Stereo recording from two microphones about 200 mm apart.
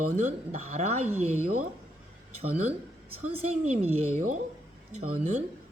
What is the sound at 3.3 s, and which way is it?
A woman's voice, 30° right (ahead or behind).